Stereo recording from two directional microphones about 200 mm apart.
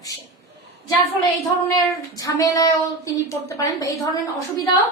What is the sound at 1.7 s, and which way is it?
Child singing, 15° left (ahead or behind).